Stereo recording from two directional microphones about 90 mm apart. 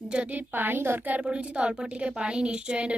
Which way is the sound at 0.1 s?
15° right (ahead or behind).